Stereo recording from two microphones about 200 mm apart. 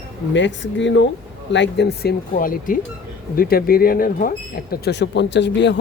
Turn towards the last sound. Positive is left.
turn(degrees=60)  # may be behind; listen again after turning